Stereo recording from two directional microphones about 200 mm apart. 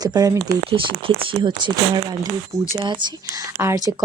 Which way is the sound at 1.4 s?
20° right (ahead or behind).